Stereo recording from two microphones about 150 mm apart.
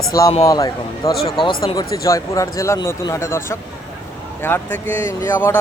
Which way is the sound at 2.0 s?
20° left (ahead or behind).